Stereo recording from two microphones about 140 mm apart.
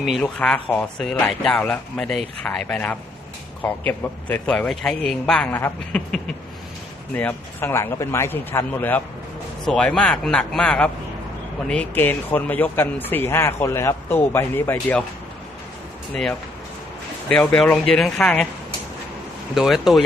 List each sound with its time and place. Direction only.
0.2 s speech: 10° left (ahead or behind)
7.1 s a man's voice: 10° left (ahead or behind)
17.2 s speech: 5° left (ahead or behind)
19.5 s a man's voice: centre (ahead or behind)